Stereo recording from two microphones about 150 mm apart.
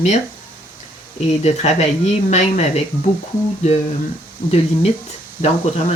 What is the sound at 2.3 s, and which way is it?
Speech, 45° left (ahead or behind).